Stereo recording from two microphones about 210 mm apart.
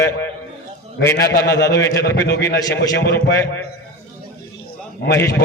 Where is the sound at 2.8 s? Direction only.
55° left (ahead or behind).